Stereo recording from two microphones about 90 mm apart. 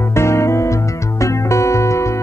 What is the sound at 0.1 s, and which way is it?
Music, 30° left (ahead or behind).